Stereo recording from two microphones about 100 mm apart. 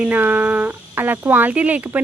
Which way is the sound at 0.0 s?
15° right (ahead or behind).